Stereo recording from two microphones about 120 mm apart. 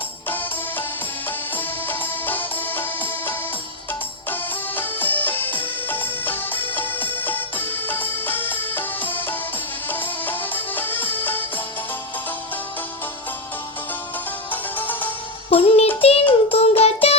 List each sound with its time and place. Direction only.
1.5 s music: 15° left (ahead or behind)
14.5 s music: 15° left (ahead or behind)
15.4 s music: 50° left (ahead or behind)
16.0 s child singing: 55° left (ahead or behind)
16.5 s music: 55° left (ahead or behind)